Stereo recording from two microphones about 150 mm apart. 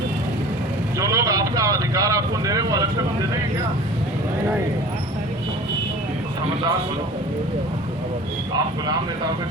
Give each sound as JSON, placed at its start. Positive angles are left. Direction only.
{"t": 0.9, "sound": "speech", "side_deg": -25}